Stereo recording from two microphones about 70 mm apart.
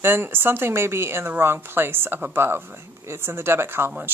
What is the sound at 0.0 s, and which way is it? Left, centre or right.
Speech, right.